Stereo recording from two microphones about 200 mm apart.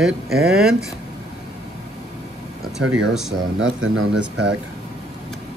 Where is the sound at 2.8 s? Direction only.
5° right (ahead or behind).